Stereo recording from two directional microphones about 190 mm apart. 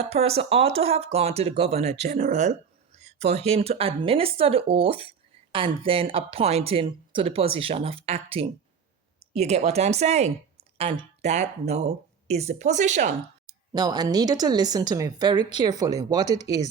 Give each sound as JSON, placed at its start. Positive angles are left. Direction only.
{"t": 0.1, "sound": "speech", "side_deg": -30}
{"t": 13.7, "sound": "a woman's voice", "side_deg": -20}